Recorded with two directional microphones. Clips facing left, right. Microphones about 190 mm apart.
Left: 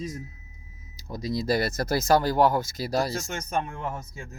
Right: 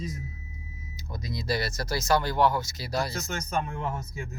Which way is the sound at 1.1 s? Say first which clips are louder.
Left 5 dB; 40° left (ahead or behind).